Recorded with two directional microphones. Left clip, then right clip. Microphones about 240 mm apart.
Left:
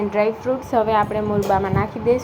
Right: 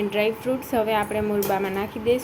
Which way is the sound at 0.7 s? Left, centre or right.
Centre.